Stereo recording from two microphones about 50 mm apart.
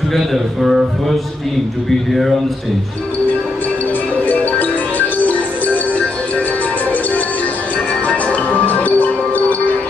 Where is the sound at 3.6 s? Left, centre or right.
Left.